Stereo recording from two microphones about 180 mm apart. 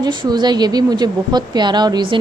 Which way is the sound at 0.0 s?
25° right (ahead or behind).